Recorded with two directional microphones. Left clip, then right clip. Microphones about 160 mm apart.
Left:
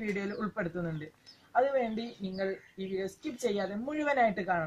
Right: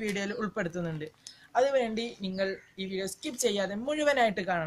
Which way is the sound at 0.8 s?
15° right (ahead or behind).